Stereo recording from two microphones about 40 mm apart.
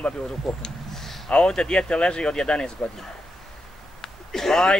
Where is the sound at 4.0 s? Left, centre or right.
Centre.